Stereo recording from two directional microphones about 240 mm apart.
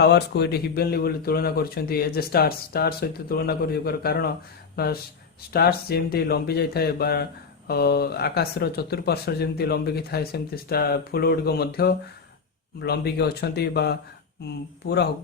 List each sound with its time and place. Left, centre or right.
0.0 s speech: left